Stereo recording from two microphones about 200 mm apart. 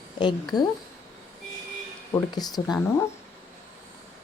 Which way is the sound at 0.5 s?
20° left (ahead or behind).